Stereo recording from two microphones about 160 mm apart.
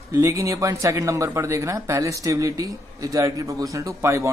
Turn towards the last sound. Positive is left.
turn(degrees=-20)  # may be behind; listen again after turning